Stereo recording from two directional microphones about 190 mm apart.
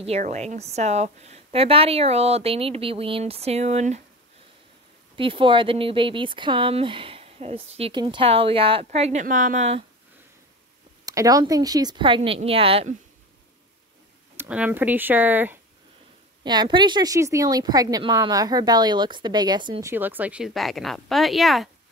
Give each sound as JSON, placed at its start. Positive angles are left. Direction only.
{"t": 0.0, "sound": "a woman's voice", "side_deg": -35}
{"t": 5.1, "sound": "a woman's voice", "side_deg": -25}
{"t": 11.1, "sound": "a woman's voice", "side_deg": -20}
{"t": 14.3, "sound": "speech", "side_deg": -10}
{"t": 16.4, "sound": "a woman's voice", "side_deg": -25}
{"t": 19.9, "sound": "a woman's voice", "side_deg": -10}